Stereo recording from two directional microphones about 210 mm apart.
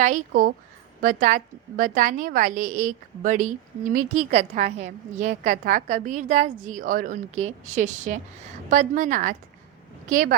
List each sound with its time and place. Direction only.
0.0 s a woman's voice: 40° right (ahead or behind)